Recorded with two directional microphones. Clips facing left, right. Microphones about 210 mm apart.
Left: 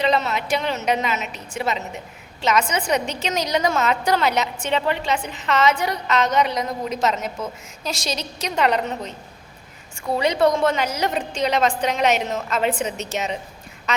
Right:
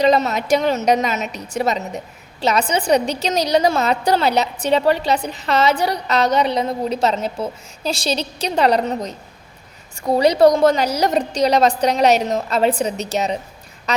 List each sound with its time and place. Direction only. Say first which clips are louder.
0.0 s a woman's voice: right 5 dB; 40° right (ahead or behind)